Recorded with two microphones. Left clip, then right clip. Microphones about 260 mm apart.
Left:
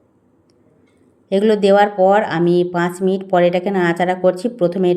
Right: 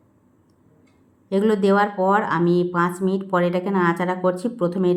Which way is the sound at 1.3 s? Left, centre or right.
Centre.